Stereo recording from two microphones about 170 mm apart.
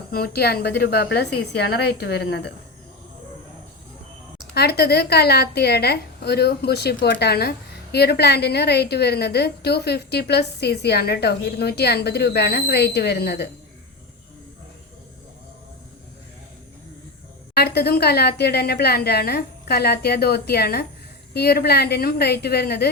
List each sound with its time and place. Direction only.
0.1 s a woman's voice: 70° left (ahead or behind)
4.5 s a woman's voice: 70° left (ahead or behind)
17.5 s a woman's voice: 70° left (ahead or behind)